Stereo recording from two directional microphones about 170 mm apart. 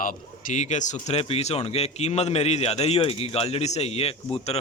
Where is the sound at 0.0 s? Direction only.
50° left (ahead or behind).